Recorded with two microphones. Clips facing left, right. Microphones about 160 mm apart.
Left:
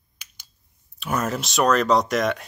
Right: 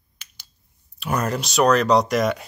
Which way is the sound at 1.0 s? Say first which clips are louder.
Right 1 dB; centre (ahead or behind).